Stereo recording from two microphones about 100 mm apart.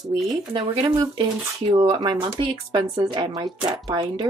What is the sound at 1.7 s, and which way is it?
Speech, 55° right (ahead or behind).